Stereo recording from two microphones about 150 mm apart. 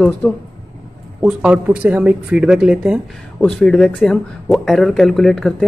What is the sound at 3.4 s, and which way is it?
Speech, 5° left (ahead or behind).